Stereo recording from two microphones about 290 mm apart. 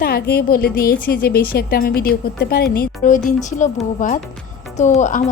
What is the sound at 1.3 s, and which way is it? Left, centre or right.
A woman's voice, left.